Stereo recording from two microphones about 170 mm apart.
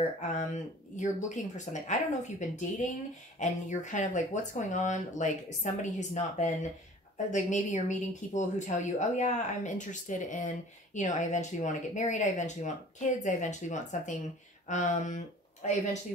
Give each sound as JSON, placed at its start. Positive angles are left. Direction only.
{"t": 0.9, "sound": "speech", "side_deg": 45}